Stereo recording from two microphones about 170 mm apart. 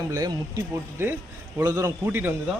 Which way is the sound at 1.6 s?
20° right (ahead or behind).